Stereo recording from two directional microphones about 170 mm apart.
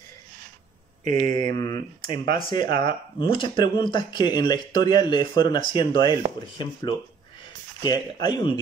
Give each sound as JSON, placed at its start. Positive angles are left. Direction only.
{"t": 1.0, "sound": "mantra", "side_deg": -50}
{"t": 1.5, "sound": "speech", "side_deg": 25}